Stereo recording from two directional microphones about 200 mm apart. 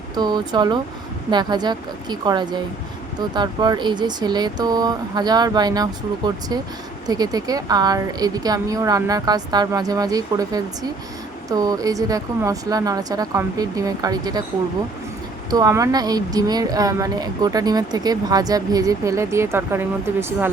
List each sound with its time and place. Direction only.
0.2 s speech: 20° right (ahead or behind)
15.4 s speech: 20° right (ahead or behind)